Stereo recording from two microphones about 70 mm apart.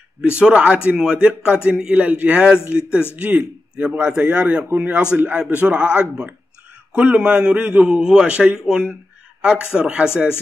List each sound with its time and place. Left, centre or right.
0.4 s a man's voice: centre